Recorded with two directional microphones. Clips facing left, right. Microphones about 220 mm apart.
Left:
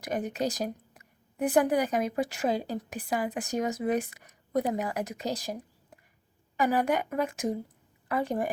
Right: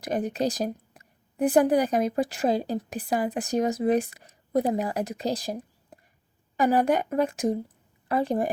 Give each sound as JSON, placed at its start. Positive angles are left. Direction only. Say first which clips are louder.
{"t": 0.0, "sound": "a woman's voice", "louder": "right 4 dB", "side_deg": -35}